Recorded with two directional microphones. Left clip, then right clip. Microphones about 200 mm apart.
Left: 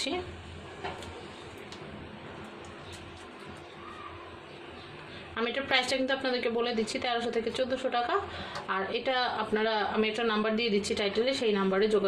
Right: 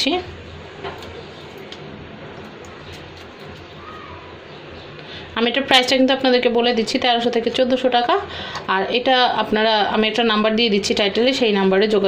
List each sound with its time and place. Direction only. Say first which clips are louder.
5.3 s a woman's voice: right 13 dB; 35° right (ahead or behind)